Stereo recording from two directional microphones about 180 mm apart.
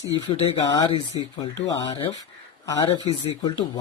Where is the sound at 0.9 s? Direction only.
35° left (ahead or behind).